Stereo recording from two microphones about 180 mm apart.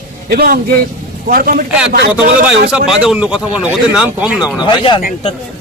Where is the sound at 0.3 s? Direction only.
55° right (ahead or behind).